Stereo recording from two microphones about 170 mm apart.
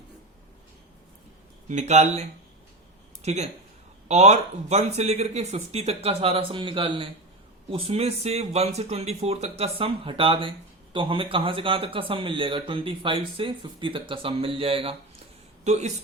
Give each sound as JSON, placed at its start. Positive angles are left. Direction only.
{"t": 1.6, "sound": "a man's voice", "side_deg": -45}
{"t": 3.2, "sound": "a man's voice", "side_deg": -40}